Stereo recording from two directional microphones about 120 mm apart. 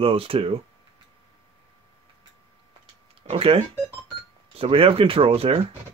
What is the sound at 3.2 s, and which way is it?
Speech, 55° right (ahead or behind).